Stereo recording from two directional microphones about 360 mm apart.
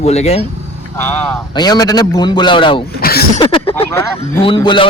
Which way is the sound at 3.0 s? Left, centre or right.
Left.